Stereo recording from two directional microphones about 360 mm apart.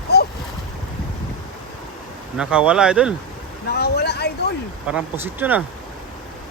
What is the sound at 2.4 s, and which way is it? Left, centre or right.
Speech, centre.